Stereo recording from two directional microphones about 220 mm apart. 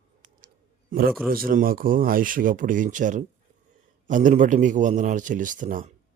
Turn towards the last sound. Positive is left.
turn(degrees=-35)  # may be behind; listen again after turning